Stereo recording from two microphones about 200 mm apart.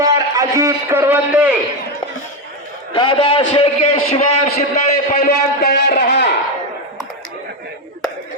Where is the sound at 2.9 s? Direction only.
25° left (ahead or behind).